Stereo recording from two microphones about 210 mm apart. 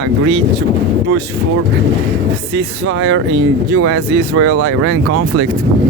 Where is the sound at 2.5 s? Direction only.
65° right (ahead or behind); by 4.9 s 90° right.